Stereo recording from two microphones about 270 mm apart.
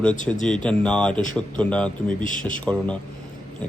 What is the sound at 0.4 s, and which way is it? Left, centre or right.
A man's voice, centre.